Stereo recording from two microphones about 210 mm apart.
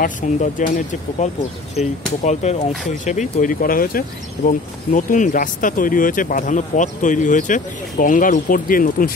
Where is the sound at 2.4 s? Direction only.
30° left (ahead or behind).